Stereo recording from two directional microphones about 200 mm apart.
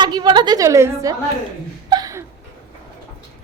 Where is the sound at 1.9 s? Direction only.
20° right (ahead or behind).